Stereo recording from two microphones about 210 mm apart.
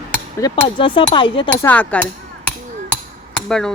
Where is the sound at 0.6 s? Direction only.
25° left (ahead or behind).